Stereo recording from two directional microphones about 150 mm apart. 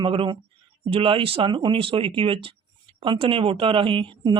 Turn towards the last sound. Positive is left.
turn(degrees=-35)  # may be behind; listen again after turning